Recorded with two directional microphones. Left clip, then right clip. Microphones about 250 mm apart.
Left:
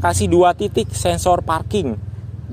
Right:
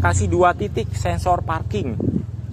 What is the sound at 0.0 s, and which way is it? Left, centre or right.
Speech, left.